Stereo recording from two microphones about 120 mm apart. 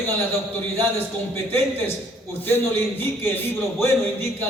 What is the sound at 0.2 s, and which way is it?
A man's voice, 20° left (ahead or behind).